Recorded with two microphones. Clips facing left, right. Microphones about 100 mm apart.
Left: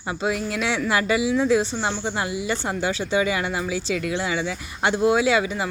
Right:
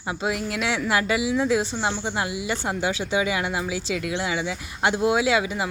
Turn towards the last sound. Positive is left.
turn(degrees=-10)  # may be behind; listen again after turning